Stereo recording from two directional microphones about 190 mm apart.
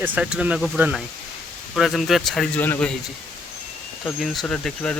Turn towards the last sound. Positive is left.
turn(degrees=5)  # may be behind; listen again after turning